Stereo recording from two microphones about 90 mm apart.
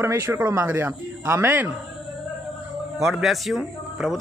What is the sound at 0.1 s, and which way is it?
Speech, 30° right (ahead or behind).